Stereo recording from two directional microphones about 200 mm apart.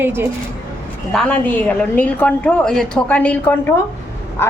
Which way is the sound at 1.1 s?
5° left (ahead or behind).